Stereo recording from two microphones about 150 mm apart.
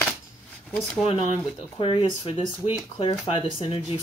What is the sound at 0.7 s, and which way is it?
Speech, 5° left (ahead or behind).